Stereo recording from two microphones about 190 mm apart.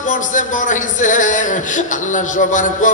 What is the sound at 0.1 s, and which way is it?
A man's voice, 40° left (ahead or behind).